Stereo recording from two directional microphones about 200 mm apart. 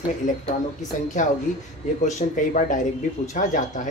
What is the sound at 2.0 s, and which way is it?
Speech, 40° left (ahead or behind).